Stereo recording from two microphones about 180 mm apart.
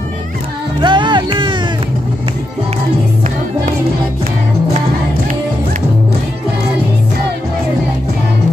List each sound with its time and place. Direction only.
0.7 s music: 25° right (ahead or behind)